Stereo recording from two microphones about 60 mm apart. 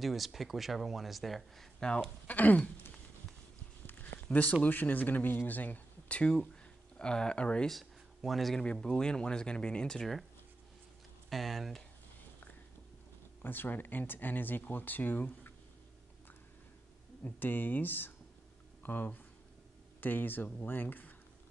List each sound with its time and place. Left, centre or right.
0.0 s speech: centre
2.2 s speech: left
4.0 s a sound: left
4.6 s speech: left
7.6 s speech: centre
8.7 s speech: centre
11.2 s speech: centre
13.4 s speech: left
17.2 s speech: left